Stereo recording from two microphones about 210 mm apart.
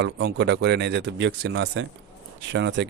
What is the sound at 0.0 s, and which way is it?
Speech, 55° right (ahead or behind).